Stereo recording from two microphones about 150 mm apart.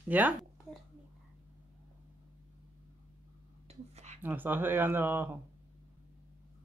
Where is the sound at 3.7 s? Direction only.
50° right (ahead or behind).